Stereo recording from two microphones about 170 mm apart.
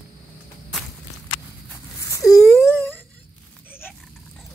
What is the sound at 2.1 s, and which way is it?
Wail, 20° left (ahead or behind).